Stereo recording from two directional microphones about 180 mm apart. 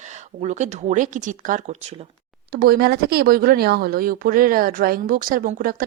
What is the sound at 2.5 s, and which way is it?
Speech, 60° right (ahead or behind).